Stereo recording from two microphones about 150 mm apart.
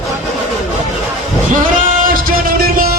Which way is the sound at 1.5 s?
65° right (ahead or behind).